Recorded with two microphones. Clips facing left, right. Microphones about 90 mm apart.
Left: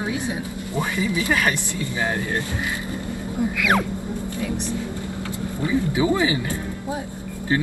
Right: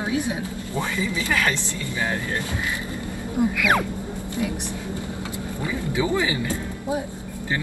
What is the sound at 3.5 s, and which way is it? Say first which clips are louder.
Music: left 3 dB; centre (ahead or behind).